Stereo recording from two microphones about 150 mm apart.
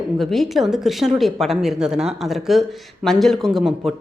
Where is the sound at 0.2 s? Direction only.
Centre (ahead or behind).